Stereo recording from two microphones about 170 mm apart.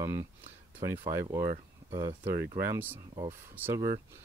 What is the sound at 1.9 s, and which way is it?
Speech, 25° right (ahead or behind).